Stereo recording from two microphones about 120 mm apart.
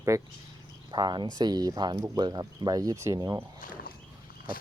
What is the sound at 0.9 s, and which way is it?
Speech, 40° right (ahead or behind).